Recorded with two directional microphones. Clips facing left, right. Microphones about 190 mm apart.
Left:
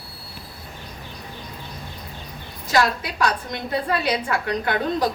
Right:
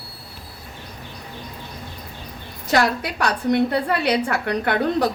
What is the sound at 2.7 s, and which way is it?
A woman's voice, 60° right (ahead or behind).